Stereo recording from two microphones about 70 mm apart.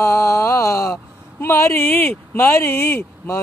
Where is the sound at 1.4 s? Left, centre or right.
Left.